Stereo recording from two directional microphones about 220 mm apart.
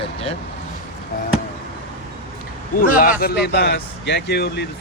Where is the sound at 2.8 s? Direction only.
40° left (ahead or behind).